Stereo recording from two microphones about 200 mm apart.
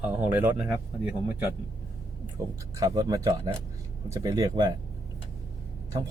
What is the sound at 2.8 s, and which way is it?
Speech, 20° right (ahead or behind).